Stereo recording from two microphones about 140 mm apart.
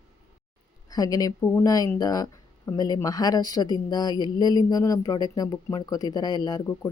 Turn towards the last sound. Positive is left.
turn(degrees=25)  # may be behind; listen again after turning